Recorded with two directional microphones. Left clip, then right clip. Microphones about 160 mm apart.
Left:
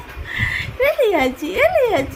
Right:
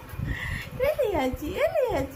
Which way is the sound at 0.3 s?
20° left (ahead or behind).